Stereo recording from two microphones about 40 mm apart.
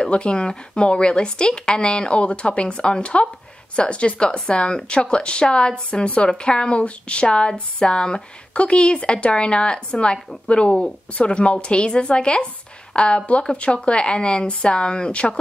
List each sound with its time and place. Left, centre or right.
0.3 s speech: centre